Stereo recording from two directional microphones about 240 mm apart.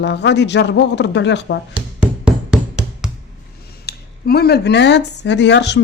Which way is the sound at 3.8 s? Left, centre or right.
Left.